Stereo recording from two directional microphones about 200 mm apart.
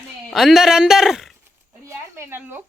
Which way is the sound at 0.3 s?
Centre (ahead or behind).